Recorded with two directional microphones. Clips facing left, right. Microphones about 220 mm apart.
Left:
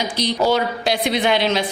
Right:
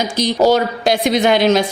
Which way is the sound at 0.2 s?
45° right (ahead or behind).